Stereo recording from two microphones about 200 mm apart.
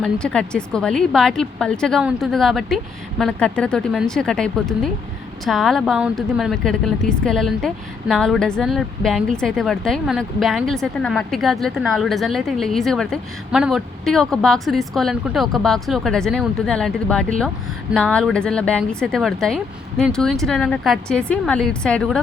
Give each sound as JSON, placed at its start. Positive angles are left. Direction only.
{"t": 0.0, "sound": "a woman's voice", "side_deg": 5}